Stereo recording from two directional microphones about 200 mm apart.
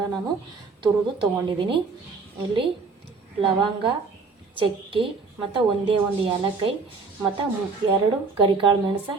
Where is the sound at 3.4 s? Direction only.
25° right (ahead or behind).